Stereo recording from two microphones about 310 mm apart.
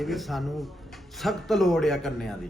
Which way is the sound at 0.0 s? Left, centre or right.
Centre.